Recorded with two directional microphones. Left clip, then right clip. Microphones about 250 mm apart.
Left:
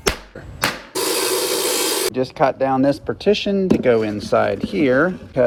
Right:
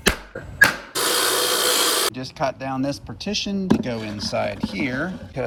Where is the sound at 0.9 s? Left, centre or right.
Centre.